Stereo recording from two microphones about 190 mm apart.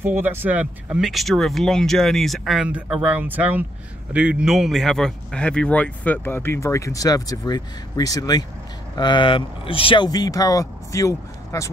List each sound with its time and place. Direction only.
0.0 s speech: 10° right (ahead or behind); by 11.7 s 15° left (ahead or behind)